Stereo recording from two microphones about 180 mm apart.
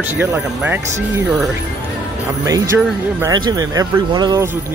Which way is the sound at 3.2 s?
20° right (ahead or behind).